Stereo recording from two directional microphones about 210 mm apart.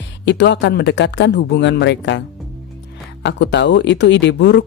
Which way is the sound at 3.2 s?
55° left (ahead or behind).